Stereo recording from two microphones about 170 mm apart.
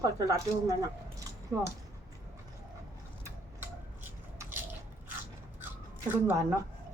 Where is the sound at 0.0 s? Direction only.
20° right (ahead or behind).